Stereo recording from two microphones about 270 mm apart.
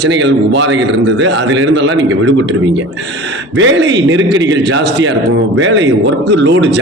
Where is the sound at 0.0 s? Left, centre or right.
Right.